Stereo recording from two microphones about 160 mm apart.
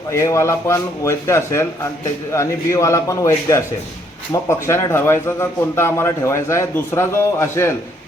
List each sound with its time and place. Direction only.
0.1 s a man's voice: 20° left (ahead or behind)